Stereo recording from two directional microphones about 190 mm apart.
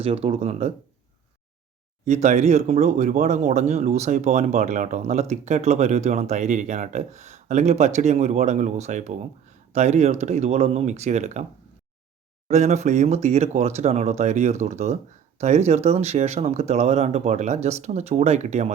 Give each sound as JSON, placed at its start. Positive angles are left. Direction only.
{"t": 0.0, "sound": "speech", "side_deg": -30}
{"t": 2.0, "sound": "speech", "side_deg": -35}
{"t": 12.5, "sound": "speech", "side_deg": -35}